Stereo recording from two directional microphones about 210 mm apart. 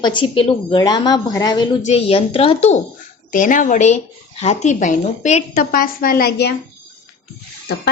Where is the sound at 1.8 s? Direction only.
30° left (ahead or behind); by 6.5 s 50° left (ahead or behind).